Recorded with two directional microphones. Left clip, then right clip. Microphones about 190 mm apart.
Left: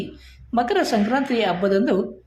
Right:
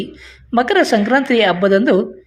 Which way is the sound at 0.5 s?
25° right (ahead or behind).